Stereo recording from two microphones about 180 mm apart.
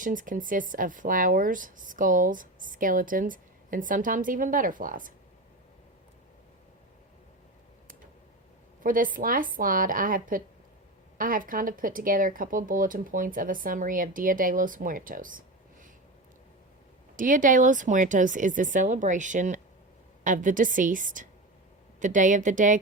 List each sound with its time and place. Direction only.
0.0 s speech: 50° right (ahead or behind)
8.8 s speech: 50° right (ahead or behind)
17.2 s speech: 50° right (ahead or behind)